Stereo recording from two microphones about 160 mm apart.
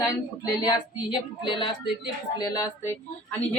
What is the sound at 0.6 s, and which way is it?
Speech, 30° left (ahead or behind).